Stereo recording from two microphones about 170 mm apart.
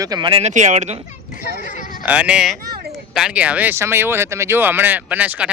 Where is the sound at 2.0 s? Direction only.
5° right (ahead or behind).